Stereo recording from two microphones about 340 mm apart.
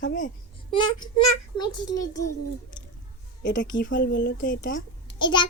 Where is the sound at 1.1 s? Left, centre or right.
Left.